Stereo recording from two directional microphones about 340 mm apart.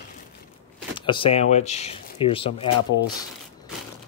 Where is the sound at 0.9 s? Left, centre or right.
Centre.